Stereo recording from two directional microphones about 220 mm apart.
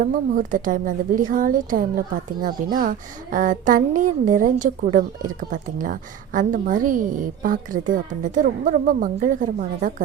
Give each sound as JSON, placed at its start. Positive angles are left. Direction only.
{"t": 0.0, "sound": "a woman's voice", "side_deg": -35}